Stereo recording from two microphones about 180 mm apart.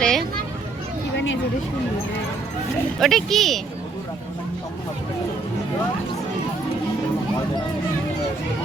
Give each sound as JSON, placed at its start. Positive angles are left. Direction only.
{"t": 0.0, "sound": "children playing", "side_deg": 5}
{"t": 1.1, "sound": "a sound", "side_deg": 90}
{"t": 3.0, "sound": "speech", "side_deg": 0}